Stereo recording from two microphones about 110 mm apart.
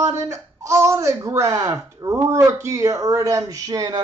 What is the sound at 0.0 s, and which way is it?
Speech, 25° right (ahead or behind).